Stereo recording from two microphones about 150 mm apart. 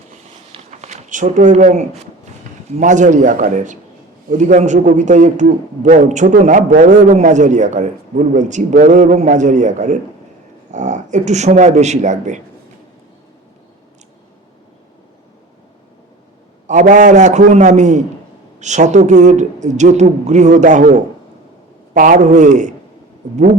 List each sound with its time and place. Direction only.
0.1 s a sound: 50° right (ahead or behind)
2.7 s a man's voice: 55° right (ahead or behind)
16.6 s a woman's voice: 55° right (ahead or behind)